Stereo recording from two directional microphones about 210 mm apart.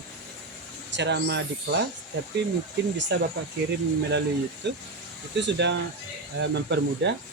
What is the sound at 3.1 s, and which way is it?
Speech, 55° right (ahead or behind).